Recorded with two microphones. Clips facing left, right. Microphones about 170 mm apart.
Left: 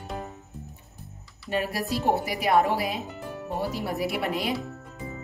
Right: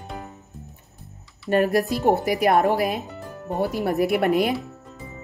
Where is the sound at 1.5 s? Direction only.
50° right (ahead or behind).